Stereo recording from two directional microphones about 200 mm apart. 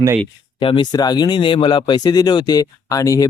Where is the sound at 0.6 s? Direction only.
25° left (ahead or behind).